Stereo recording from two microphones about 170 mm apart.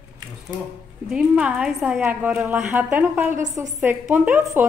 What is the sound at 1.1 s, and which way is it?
A woman's voice, 5° right (ahead or behind).